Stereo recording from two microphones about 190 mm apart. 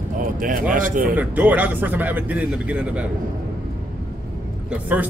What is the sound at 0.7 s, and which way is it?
Speech, 45° right (ahead or behind).